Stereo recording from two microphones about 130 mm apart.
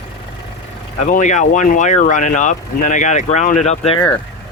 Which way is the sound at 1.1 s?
70° left (ahead or behind).